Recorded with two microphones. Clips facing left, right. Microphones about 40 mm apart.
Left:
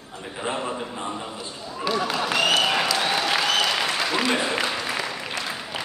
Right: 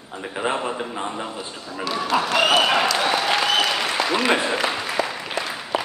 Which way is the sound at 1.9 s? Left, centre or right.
Centre.